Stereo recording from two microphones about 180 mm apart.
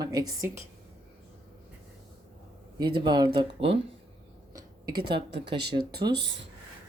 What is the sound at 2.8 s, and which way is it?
Speech, 25° right (ahead or behind).